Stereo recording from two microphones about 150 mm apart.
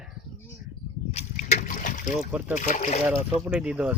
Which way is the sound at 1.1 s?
50° left (ahead or behind).